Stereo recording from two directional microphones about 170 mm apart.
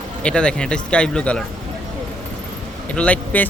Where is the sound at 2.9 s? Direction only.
5° left (ahead or behind).